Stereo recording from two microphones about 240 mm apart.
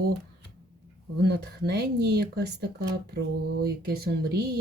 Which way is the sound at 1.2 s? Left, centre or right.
Right.